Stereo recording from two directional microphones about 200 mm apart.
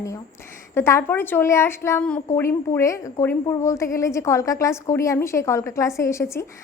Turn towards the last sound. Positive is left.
turn(degrees=15)  # may be behind; listen again after turning